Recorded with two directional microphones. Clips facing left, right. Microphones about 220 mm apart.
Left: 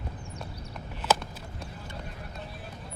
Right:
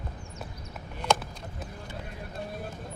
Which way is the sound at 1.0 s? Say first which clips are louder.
Even; 5° left (ahead or behind).